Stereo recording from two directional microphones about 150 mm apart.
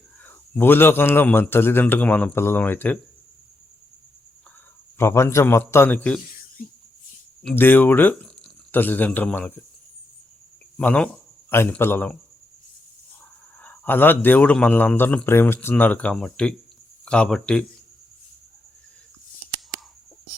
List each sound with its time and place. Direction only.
0.2 s a man's voice: 10° left (ahead or behind)
4.9 s a man's voice: 15° left (ahead or behind)
7.4 s speech: 10° left (ahead or behind)
10.8 s a man's voice: 5° left (ahead or behind)
13.6 s a man's voice: 10° left (ahead or behind)